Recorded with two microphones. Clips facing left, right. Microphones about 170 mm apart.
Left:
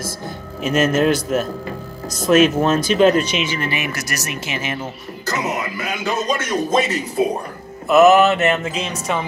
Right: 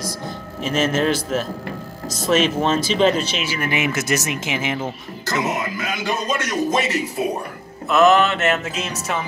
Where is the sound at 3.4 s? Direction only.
15° right (ahead or behind).